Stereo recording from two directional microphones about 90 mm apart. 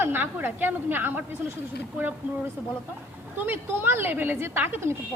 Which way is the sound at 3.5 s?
25° right (ahead or behind).